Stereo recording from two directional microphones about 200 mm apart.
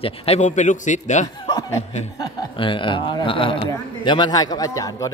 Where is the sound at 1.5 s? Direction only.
20° left (ahead or behind).